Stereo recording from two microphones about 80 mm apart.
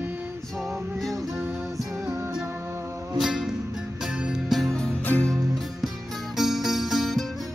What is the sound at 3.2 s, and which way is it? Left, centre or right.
Music, centre.